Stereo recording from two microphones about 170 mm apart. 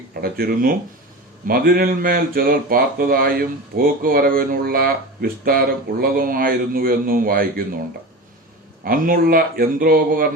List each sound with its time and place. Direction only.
0.2 s speech: 60° right (ahead or behind)
8.8 s speech: 55° right (ahead or behind)